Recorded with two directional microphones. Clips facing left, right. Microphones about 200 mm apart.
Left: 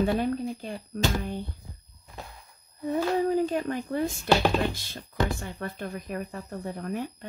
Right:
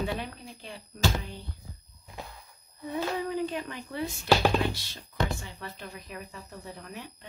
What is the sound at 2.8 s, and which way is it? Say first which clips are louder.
Speech: left 6 dB; 45° left (ahead or behind).